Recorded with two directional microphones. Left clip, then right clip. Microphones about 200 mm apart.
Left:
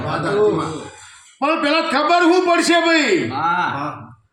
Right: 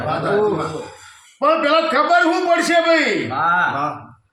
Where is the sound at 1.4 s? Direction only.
10° right (ahead or behind).